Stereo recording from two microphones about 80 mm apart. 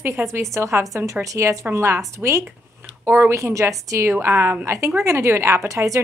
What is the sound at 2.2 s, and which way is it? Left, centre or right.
A woman's voice, right.